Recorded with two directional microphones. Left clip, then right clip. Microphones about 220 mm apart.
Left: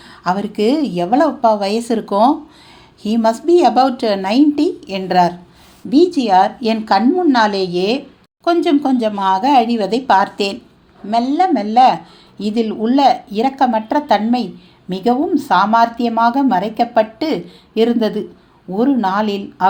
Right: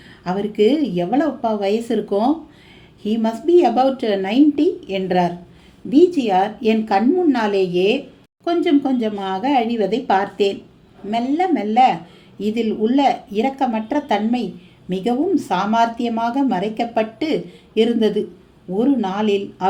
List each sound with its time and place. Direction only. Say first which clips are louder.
0.3 s a woman's voice: left 1 dB; 15° left (ahead or behind)